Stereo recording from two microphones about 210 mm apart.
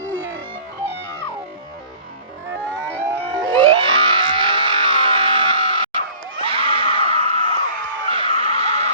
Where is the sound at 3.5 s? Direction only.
25° right (ahead or behind).